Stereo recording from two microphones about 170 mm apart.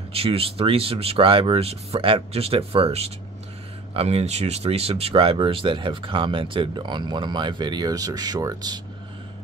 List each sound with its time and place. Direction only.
0.1 s speech: 35° right (ahead or behind)